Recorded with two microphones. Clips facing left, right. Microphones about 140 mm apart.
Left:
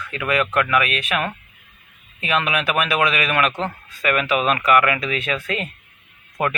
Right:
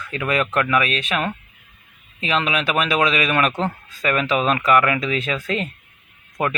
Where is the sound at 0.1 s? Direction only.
30° right (ahead or behind).